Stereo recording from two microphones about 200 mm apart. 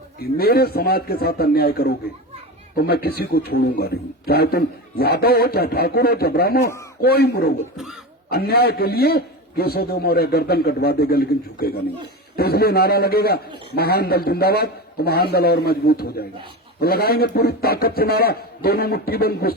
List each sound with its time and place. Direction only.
0.2 s a man's voice: 50° left (ahead or behind)